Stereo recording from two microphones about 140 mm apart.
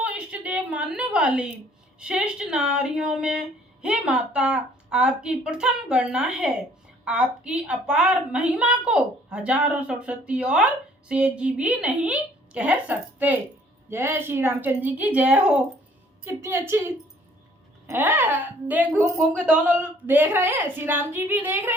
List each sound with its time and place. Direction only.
0.0 s a sound: 10° right (ahead or behind)
2.0 s speech: 5° right (ahead or behind)
16.2 s a woman's voice: 20° right (ahead or behind)